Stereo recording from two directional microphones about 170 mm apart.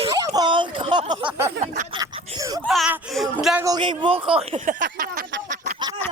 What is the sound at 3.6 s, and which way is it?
Speech, 25° right (ahead or behind).